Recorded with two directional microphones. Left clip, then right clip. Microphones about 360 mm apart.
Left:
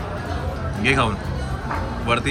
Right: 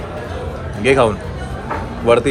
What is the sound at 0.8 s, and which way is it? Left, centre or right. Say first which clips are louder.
Speech: right 7 dB; centre.